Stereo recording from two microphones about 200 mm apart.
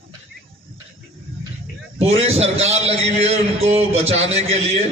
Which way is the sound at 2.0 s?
30° right (ahead or behind).